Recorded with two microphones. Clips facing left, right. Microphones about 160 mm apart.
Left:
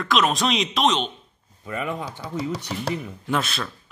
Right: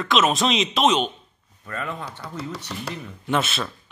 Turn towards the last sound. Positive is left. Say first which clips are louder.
# right 1 dB
turn(degrees=-5)  # may be behind; listen again after turning